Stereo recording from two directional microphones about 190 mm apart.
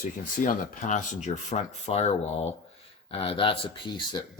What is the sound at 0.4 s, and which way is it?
Speech, 45° left (ahead or behind).